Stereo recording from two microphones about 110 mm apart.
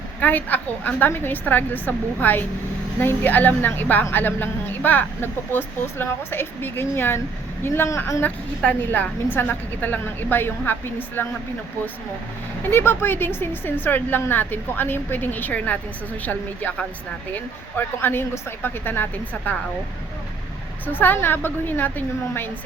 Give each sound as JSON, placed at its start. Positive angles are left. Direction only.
{"t": 0.2, "sound": "a woman's voice", "side_deg": 15}
{"t": 12.7, "sound": "a woman's voice", "side_deg": 20}
{"t": 20.8, "sound": "a woman's voice", "side_deg": 20}